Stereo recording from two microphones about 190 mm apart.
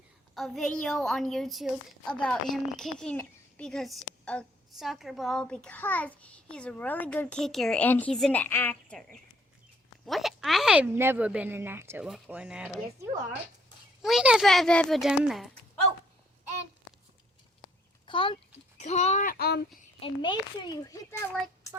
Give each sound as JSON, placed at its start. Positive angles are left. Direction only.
{"t": 0.3, "sound": "a woman's voice", "side_deg": 0}
{"t": 10.1, "sound": "a woman's voice", "side_deg": 0}
{"t": 14.0, "sound": "a woman's voice", "side_deg": 0}
{"t": 18.0, "sound": "a child's voice", "side_deg": 25}
{"t": 20.0, "sound": "a child's voice", "side_deg": 25}